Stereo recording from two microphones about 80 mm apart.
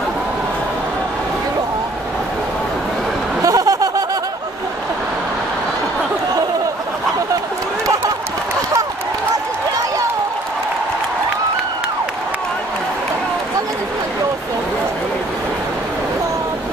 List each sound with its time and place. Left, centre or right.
3.4 s snicker: right